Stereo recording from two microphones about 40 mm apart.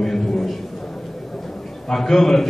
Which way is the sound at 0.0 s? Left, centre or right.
Centre.